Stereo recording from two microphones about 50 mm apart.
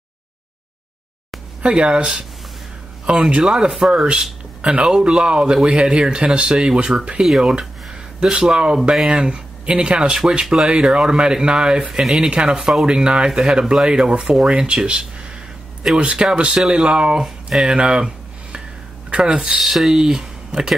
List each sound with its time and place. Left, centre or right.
1.6 s speech: centre
3.4 s speech: centre
7.2 s speech: centre
17.7 s a sound: centre
19.0 s speech: right
19.6 s speech: centre